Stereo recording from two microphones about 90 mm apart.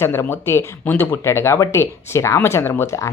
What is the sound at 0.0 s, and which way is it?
Speech, 25° left (ahead or behind).